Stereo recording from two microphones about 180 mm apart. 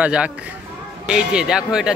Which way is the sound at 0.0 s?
5° right (ahead or behind).